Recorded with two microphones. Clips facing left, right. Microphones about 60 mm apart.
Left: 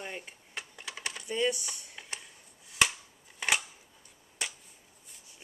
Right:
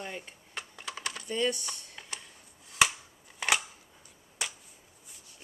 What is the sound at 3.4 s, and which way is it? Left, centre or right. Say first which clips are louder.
Scissors: right 1 dB; centre.